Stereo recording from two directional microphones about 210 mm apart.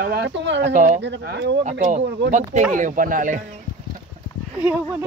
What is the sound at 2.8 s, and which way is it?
Speech, 40° right (ahead or behind).